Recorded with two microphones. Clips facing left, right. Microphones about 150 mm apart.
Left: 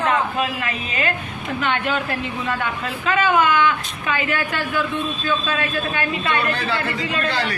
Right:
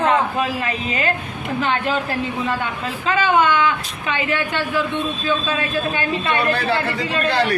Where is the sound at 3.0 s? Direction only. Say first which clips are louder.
Right 1 dB; 30° right (ahead or behind).